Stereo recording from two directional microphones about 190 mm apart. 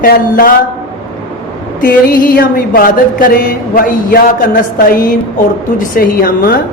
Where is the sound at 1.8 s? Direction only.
50° left (ahead or behind).